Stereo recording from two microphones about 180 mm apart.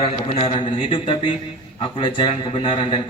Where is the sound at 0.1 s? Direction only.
30° left (ahead or behind).